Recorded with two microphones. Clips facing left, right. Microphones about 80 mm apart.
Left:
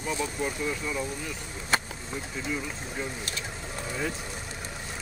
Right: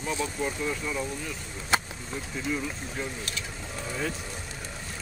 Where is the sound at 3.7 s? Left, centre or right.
Centre.